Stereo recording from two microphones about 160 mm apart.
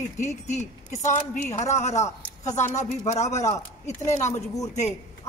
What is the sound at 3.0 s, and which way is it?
A woman's voice, 45° left (ahead or behind).